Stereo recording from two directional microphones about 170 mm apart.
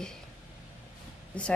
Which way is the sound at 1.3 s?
10° left (ahead or behind).